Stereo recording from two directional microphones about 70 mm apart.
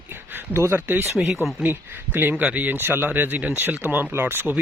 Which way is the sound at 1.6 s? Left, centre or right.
Right.